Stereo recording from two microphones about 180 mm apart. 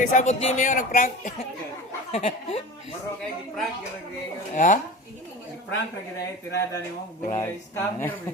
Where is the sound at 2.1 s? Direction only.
35° left (ahead or behind).